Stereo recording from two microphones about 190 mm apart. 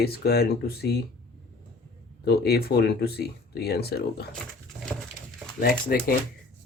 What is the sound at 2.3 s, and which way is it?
Speech, 55° left (ahead or behind).